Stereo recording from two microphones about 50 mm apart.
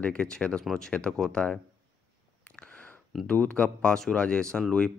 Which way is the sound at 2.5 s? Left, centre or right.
Left.